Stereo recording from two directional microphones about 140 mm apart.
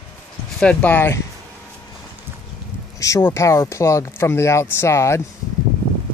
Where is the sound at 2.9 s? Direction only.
20° left (ahead or behind).